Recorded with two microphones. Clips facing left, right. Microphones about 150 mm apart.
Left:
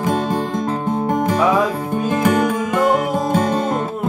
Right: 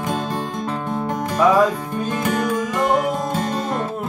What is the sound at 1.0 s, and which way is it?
Music, 50° left (ahead or behind).